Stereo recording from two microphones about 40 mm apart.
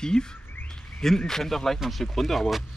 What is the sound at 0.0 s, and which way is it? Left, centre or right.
A man's voice, centre.